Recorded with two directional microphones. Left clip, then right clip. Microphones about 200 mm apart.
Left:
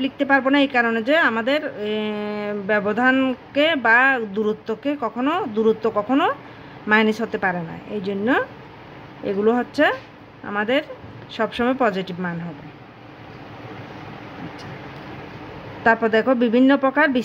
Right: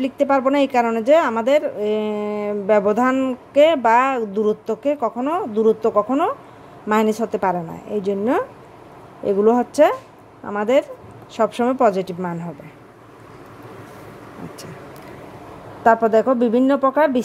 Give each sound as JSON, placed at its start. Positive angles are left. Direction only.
{"t": 0.0, "sound": "a woman's voice", "side_deg": -25}
{"t": 15.8, "sound": "speech", "side_deg": -15}